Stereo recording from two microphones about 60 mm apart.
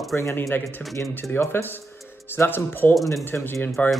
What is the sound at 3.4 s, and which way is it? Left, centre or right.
Speech, left.